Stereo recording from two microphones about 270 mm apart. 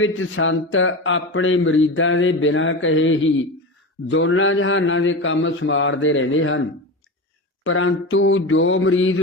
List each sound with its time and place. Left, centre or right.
0.0 s speech: left